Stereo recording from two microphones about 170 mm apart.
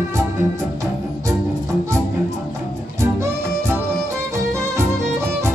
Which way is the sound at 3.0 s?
15° right (ahead or behind).